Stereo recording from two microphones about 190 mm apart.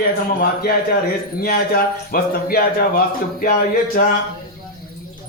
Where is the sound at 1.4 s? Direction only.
50° left (ahead or behind).